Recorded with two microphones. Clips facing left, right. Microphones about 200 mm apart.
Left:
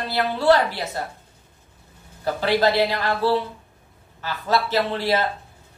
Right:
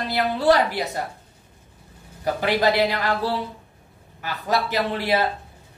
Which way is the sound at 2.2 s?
15° right (ahead or behind).